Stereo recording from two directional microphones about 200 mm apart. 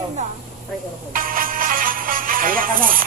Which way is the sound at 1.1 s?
45° right (ahead or behind).